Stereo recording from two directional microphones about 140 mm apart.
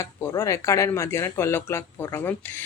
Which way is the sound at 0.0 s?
20° left (ahead or behind).